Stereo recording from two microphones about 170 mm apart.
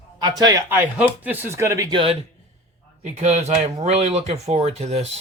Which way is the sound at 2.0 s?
35° right (ahead or behind).